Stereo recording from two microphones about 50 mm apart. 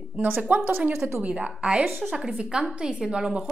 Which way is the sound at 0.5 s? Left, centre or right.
Right.